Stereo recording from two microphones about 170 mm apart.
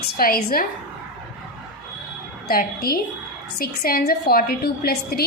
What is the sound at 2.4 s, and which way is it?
A woman's voice, 60° left (ahead or behind).